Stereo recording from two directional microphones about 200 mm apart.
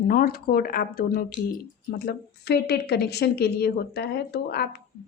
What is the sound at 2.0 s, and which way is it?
A woman's voice, 55° left (ahead or behind).